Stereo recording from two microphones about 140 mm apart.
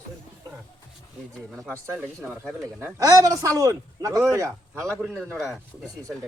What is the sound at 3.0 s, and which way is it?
Speech, 25° right (ahead or behind).